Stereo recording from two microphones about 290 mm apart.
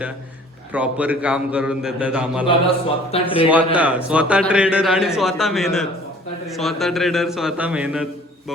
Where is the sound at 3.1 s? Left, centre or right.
Left.